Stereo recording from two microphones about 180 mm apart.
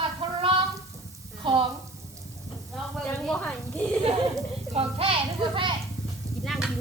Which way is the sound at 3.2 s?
5° left (ahead or behind).